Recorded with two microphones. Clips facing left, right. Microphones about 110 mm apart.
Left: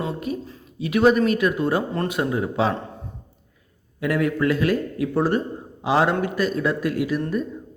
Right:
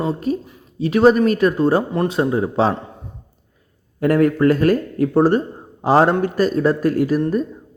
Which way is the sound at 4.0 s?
45° right (ahead or behind).